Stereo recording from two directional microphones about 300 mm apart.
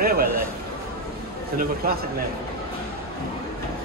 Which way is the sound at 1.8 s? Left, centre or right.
Right.